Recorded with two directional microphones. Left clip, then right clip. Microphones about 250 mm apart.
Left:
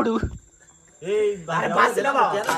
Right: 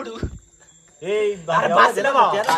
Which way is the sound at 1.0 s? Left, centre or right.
Right.